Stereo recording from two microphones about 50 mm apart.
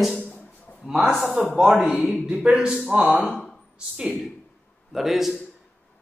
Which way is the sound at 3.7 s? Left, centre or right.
Centre.